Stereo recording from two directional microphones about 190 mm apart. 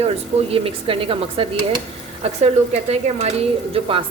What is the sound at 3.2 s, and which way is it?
Speech, 30° right (ahead or behind).